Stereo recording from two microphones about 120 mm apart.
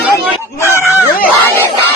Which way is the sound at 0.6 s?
20° left (ahead or behind).